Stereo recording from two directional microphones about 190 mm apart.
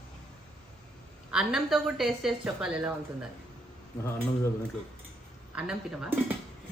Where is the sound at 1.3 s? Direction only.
Centre (ahead or behind).